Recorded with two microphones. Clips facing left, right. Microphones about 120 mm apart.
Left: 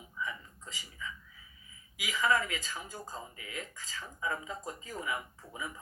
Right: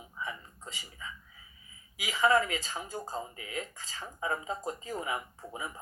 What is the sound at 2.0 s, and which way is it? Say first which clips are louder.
Speech: right 4 dB; 40° right (ahead or behind).